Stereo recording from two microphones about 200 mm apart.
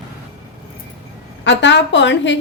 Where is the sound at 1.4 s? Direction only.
60° left (ahead or behind).